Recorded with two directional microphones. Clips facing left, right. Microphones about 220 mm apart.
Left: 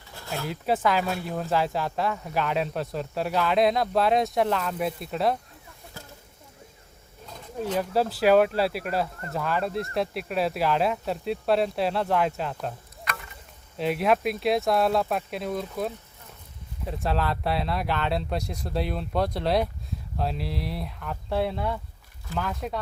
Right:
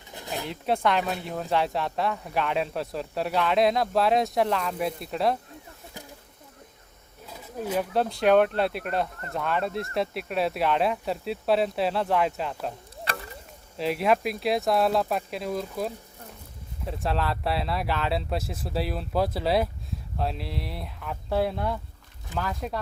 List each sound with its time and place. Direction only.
0.1 s a sound: 20° right (ahead or behind)
0.4 s speech: centre (ahead or behind)
7.3 s a sound: 5° right (ahead or behind)
7.9 s speech: 5° left (ahead or behind)
13.1 s chop: 35° right (ahead or behind)
13.7 s speech: centre (ahead or behind)